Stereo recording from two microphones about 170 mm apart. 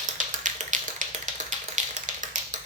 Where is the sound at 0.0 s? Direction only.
50° right (ahead or behind).